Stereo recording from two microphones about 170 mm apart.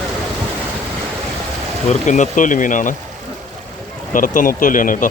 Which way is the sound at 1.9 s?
45° left (ahead or behind).